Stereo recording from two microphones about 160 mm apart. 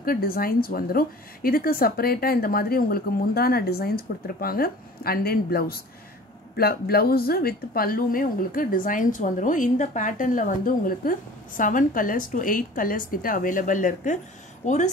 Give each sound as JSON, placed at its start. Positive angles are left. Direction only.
{"t": 0.0, "sound": "a woman's voice", "side_deg": 65}